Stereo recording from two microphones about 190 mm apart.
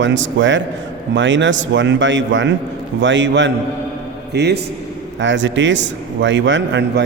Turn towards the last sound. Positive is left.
turn(degrees=-70)  # may be behind; listen again after turning